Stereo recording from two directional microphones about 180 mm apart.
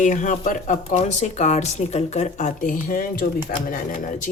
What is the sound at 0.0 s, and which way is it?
Speech, 45° left (ahead or behind).